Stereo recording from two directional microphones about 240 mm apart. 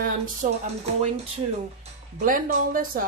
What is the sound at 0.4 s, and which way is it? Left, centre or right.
Speech, right.